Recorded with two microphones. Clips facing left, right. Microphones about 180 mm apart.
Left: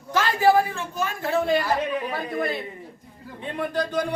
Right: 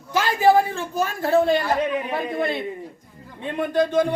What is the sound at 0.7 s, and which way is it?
A woman's voice, 35° right (ahead or behind).